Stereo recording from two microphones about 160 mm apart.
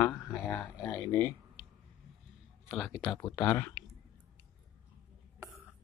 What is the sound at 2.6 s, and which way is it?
Speech, centre (ahead or behind).